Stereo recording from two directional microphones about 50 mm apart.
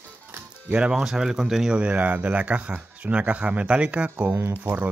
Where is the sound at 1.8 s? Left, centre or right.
Right.